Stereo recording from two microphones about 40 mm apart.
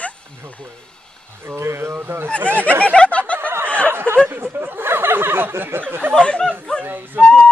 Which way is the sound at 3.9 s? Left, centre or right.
Right.